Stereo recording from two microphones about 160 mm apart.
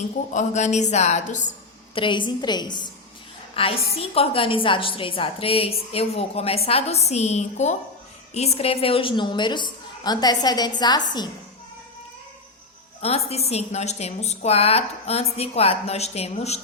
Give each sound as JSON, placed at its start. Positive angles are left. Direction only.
{"t": 0.3, "sound": "speech", "side_deg": 45}
{"t": 2.0, "sound": "a woman's voice", "side_deg": 30}
{"t": 13.0, "sound": "a woman's voice", "side_deg": 40}